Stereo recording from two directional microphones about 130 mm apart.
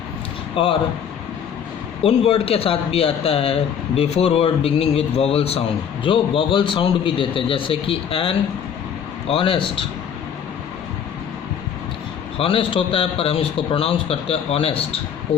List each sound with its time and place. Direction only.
0.5 s speech: 45° left (ahead or behind)
2.0 s speech: 50° left (ahead or behind)
12.4 s speech: 45° left (ahead or behind)